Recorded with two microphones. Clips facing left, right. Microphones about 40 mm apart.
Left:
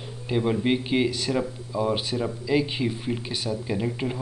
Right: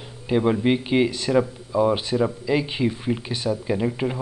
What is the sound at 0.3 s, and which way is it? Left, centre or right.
Speech, centre.